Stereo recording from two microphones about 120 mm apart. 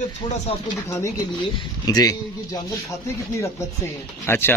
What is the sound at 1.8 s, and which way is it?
Speech, 30° left (ahead or behind).